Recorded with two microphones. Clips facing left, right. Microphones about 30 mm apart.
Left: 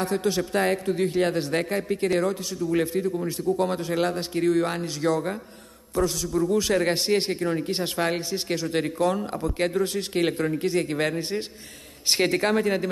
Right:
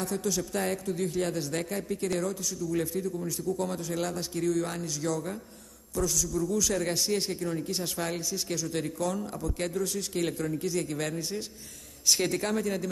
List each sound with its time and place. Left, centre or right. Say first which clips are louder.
0.0 s a man's voice: left 6 dB; left